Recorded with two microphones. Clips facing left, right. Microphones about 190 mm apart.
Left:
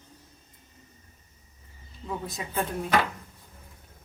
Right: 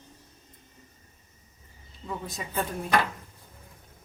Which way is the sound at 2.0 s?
Centre (ahead or behind).